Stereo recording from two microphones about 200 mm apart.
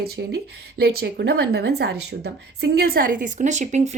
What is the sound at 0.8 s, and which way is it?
Speech, 55° right (ahead or behind).